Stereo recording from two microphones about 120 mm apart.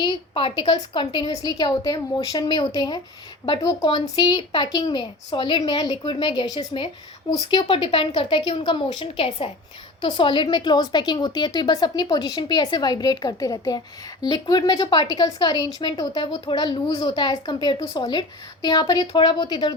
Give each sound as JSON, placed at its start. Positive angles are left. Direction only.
{"t": 0.0, "sound": "a woman's voice", "side_deg": 45}
{"t": 1.3, "sound": "a woman's voice", "side_deg": 30}
{"t": 7.9, "sound": "a woman's voice", "side_deg": 50}